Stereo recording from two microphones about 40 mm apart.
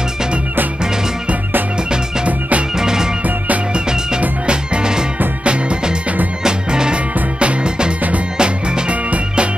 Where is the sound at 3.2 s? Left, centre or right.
Right.